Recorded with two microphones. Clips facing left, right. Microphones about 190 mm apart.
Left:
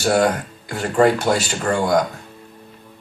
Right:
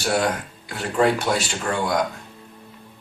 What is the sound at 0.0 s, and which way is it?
Speech, 45° left (ahead or behind).